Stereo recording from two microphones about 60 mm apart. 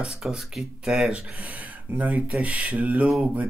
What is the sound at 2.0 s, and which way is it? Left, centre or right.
Speech, right.